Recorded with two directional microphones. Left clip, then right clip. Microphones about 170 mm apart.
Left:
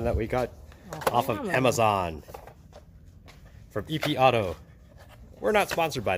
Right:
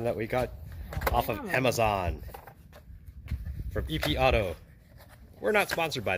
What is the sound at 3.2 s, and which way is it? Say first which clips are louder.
Speech: right 5 dB; 5° left (ahead or behind).